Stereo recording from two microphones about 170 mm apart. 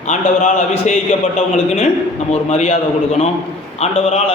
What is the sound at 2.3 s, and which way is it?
A man's voice, 40° left (ahead or behind).